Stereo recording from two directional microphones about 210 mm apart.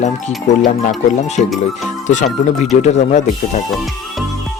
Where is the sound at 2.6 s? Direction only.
35° left (ahead or behind).